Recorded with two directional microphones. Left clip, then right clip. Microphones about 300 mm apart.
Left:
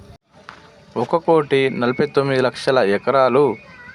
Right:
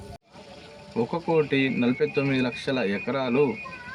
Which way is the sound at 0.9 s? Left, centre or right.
Left.